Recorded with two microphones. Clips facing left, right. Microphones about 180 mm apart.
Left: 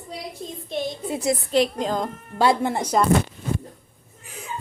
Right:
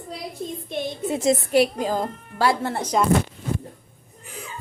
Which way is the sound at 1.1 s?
25° right (ahead or behind).